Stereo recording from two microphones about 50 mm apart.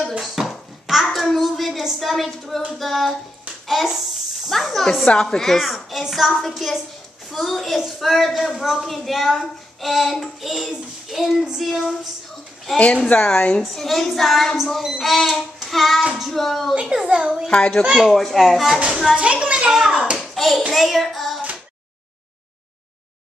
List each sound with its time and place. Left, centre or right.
0.2 s a sound: centre
2.8 s a woman's voice: centre
3.6 s a sound: centre
4.5 s snake: centre
5.0 s a woman's voice: centre
5.6 s a woman's voice: centre
12.7 s a woman's voice: left
13.6 s a woman's voice: centre
16.8 s a child's voice: centre
17.5 s a woman's voice: centre
18.0 s a woman's voice: centre
19.1 s a child's voice: right
19.7 s a woman's voice: centre
20.7 s child singing: centre